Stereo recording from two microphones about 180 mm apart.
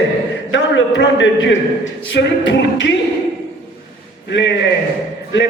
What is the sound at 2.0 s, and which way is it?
Music, 85° left.